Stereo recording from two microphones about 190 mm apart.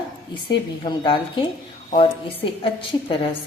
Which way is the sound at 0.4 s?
25° left (ahead or behind).